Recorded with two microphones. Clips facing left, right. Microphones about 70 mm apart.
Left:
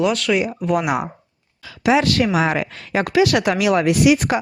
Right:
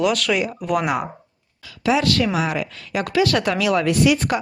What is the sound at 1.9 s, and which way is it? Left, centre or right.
A woman's voice, left.